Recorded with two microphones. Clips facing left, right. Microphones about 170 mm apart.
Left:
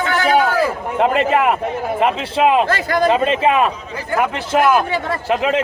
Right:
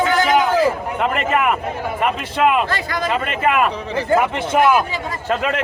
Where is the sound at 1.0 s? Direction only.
35° left (ahead or behind).